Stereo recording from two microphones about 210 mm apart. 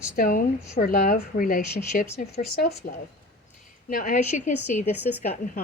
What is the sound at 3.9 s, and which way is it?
A woman's voice, 35° left (ahead or behind).